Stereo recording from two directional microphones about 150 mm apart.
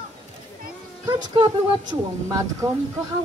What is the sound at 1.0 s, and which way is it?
Speech, 30° right (ahead or behind).